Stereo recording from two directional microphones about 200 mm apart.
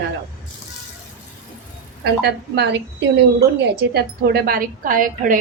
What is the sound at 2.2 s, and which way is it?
A woman's voice, 55° right (ahead or behind).